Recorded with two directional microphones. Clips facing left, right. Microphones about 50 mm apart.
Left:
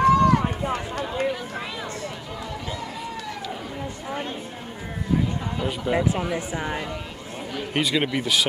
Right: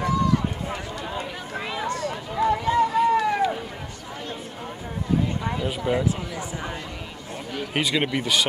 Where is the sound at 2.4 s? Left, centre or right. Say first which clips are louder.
Right 15 dB; right.